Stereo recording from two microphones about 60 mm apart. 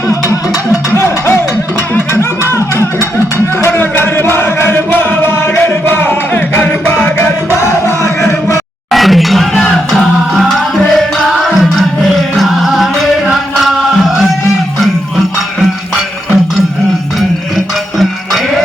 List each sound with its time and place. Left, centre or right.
2.5 s music: left
7.6 s music: left
8.9 s a sound: centre
10.8 s music: centre
12.4 s music: centre